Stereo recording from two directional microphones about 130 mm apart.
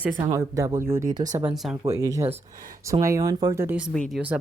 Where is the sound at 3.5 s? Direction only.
15° right (ahead or behind).